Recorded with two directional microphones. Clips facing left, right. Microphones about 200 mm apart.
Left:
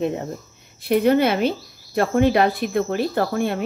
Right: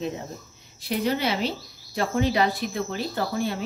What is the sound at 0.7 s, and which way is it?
Speech, 55° left (ahead or behind).